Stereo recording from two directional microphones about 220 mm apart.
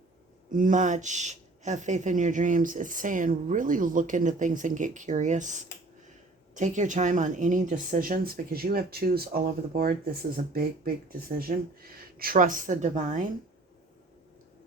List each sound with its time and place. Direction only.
0.5 s speech: 35° right (ahead or behind)